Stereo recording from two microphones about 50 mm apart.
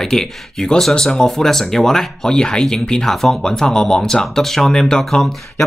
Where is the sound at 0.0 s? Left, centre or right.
Centre.